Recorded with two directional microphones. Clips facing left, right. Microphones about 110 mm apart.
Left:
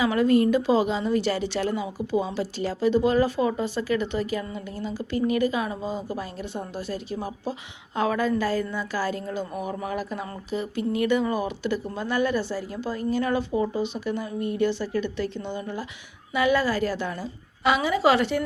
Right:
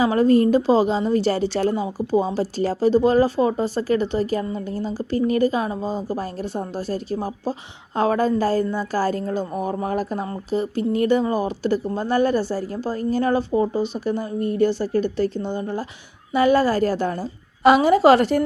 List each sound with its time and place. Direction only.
0.0 s a woman's voice: 35° right (ahead or behind)